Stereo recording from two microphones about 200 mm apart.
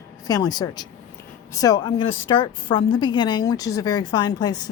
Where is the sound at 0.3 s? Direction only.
20° left (ahead or behind).